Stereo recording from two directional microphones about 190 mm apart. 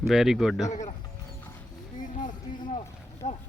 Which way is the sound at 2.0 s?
40° left (ahead or behind).